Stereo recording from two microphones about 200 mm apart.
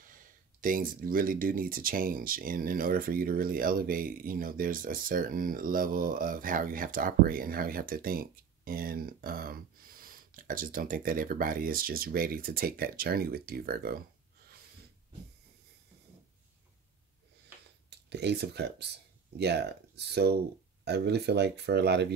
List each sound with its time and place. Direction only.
0.1 s speech: 45° right (ahead or behind)
17.8 s speech: 55° right (ahead or behind)